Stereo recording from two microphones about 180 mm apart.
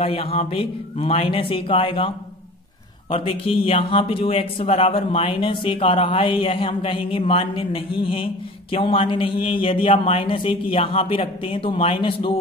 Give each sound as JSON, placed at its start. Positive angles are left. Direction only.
{"t": 0.0, "sound": "speech", "side_deg": 30}